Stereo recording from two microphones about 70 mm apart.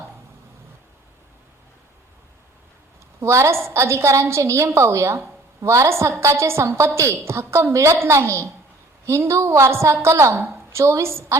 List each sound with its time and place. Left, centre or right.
3.2 s a woman's voice: right